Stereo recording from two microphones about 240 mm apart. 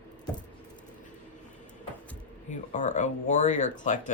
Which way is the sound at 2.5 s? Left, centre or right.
Left.